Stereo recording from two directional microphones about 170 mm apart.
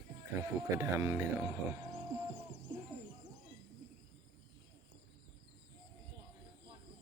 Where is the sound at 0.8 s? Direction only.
15° right (ahead or behind).